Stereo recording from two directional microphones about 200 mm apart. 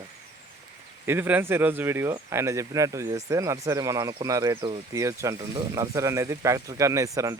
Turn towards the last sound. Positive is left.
turn(degrees=-15)  # may be behind; listen again after turning